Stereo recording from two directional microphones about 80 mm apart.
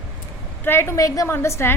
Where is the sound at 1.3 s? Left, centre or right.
Left.